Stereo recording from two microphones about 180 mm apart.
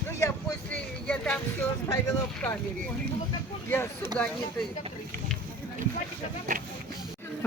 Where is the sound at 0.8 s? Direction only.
5° left (ahead or behind).